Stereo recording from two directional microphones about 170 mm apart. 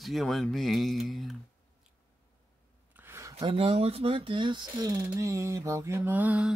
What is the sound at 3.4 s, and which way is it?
Speech, 30° right (ahead or behind).